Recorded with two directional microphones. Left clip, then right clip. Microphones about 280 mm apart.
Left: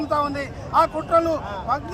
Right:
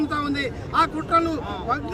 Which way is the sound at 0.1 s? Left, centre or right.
Centre.